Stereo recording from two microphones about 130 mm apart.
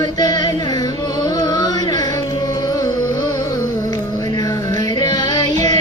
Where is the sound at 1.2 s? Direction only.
30° left (ahead or behind).